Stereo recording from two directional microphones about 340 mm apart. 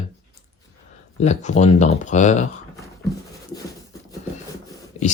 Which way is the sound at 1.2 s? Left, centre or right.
Centre.